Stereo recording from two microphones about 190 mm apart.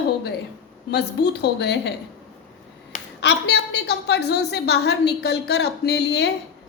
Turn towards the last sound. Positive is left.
turn(degrees=60)  # may be behind; listen again after turning